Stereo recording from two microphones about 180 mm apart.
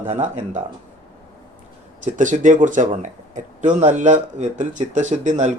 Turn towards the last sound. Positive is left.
turn(degrees=-40)  # may be behind; listen again after turning